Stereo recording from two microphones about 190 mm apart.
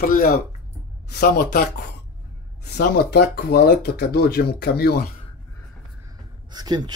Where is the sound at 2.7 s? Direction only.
55° left (ahead or behind).